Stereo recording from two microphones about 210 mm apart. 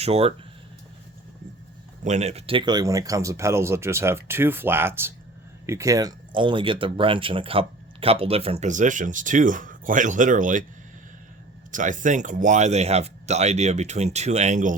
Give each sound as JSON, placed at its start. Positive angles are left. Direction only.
{"t": 0.0, "sound": "speech", "side_deg": -30}
{"t": 2.0, "sound": "speech", "side_deg": -30}
{"t": 11.7, "sound": "speech", "side_deg": -40}